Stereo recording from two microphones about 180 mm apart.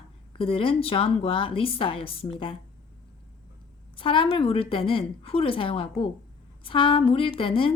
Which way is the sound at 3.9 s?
30° left (ahead or behind).